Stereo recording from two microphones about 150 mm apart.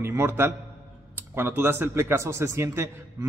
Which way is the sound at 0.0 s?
15° right (ahead or behind).